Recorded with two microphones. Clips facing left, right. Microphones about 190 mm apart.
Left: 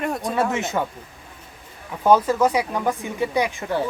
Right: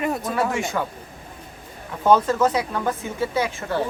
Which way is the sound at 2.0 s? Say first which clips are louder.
Left 1 dB; 10° left (ahead or behind).